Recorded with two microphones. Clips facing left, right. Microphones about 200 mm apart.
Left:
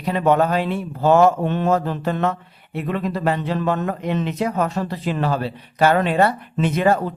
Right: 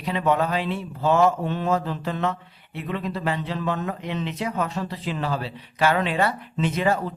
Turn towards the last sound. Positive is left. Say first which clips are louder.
# left 5 dB
turn(degrees=55)  # may be behind; listen again after turning